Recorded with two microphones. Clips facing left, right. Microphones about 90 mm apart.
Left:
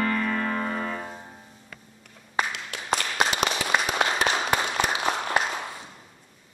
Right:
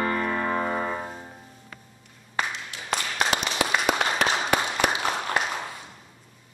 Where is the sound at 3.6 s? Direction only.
85° right.